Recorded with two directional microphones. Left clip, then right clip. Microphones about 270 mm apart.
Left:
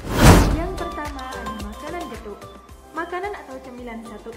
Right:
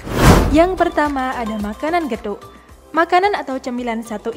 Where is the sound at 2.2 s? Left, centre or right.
Right.